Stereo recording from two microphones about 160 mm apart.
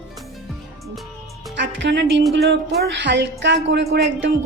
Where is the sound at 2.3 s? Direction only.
90° right.